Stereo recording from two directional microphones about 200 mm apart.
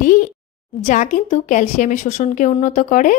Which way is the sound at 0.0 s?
40° left (ahead or behind).